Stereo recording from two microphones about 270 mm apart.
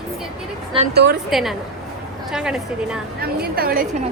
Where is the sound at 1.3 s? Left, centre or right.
Centre.